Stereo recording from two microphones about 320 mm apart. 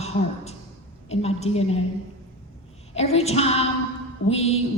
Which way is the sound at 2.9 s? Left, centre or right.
Centre.